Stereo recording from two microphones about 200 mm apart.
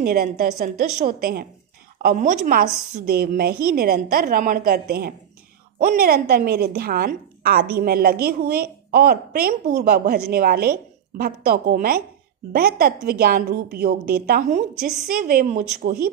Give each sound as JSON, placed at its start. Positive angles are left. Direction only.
{"t": 0.0, "sound": "a woman's voice", "side_deg": -50}
{"t": 3.1, "sound": "a woman's voice", "side_deg": -50}